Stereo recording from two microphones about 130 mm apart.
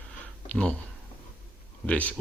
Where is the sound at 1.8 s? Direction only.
10° left (ahead or behind).